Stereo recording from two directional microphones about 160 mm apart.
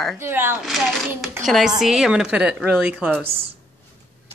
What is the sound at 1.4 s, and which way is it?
A woman's voice, centre (ahead or behind).